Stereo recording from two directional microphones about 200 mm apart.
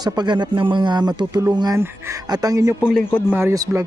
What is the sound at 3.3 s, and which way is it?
Speech, 15° right (ahead or behind).